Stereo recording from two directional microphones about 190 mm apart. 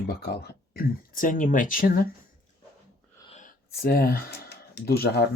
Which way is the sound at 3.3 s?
45° left (ahead or behind).